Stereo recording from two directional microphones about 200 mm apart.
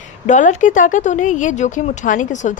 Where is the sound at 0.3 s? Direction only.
40° left (ahead or behind).